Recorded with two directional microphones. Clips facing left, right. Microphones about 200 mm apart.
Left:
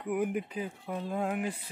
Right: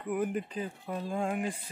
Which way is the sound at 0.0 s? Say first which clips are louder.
Left 1 dB; 10° left (ahead or behind).